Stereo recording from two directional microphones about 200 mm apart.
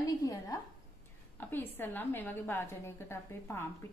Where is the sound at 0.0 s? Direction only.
15° left (ahead or behind).